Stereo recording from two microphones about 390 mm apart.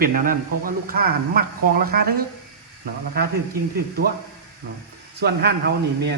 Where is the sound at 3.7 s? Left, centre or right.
Right.